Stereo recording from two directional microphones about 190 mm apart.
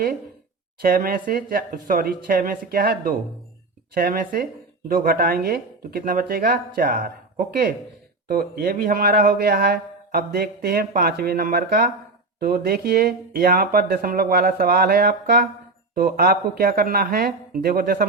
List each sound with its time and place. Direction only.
0.8 s speech: 50° right (ahead or behind)